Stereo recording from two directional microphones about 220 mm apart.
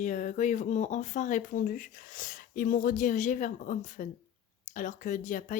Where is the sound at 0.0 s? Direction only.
35° left (ahead or behind).